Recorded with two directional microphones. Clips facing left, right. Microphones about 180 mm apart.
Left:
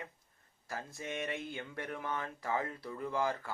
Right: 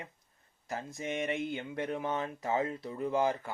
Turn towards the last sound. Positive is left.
turn(degrees=-20)  # may be behind; listen again after turning